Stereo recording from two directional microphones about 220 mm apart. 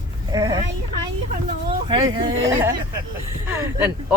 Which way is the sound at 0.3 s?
15° right (ahead or behind).